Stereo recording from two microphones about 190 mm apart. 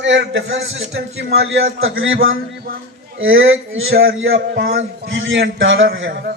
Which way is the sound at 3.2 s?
90° right.